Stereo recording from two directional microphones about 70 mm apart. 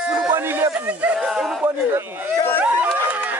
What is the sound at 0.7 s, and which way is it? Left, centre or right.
Speech, right.